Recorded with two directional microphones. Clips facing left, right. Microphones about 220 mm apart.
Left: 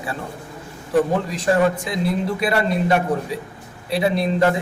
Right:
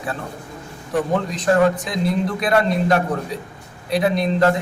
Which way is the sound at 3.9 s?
5° left (ahead or behind).